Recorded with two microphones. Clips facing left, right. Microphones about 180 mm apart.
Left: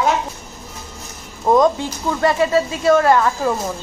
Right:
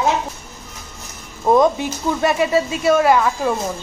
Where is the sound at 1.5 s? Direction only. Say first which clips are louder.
Even; 15° right (ahead or behind).